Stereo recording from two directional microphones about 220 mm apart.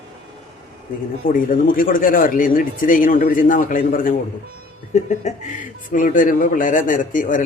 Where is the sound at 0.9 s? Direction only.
40° left (ahead or behind).